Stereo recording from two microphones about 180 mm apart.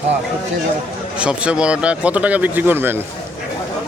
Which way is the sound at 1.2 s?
5° right (ahead or behind).